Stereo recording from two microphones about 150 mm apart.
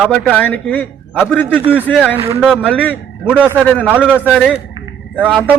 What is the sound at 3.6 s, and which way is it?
Speech, 10° left (ahead or behind).